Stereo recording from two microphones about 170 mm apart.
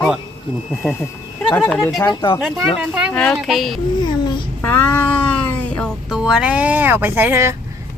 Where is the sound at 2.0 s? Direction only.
25° left (ahead or behind).